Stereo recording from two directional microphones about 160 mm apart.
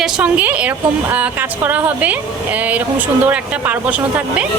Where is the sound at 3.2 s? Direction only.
10° right (ahead or behind).